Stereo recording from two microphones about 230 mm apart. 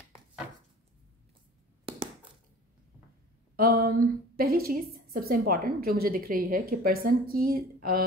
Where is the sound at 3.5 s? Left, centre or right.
Right.